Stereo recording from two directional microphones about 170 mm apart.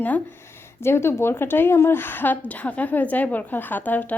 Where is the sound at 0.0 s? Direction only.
10° left (ahead or behind).